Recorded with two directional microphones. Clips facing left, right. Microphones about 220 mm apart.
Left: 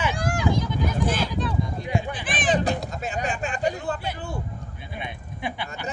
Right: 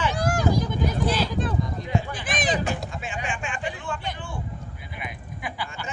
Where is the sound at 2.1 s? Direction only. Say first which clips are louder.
Left 2 dB; 40° right (ahead or behind).